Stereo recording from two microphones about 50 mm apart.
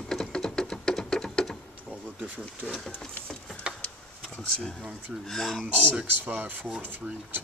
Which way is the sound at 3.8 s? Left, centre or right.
Centre.